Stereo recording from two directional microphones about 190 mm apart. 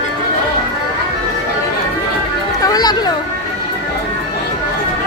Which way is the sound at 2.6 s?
20° left (ahead or behind).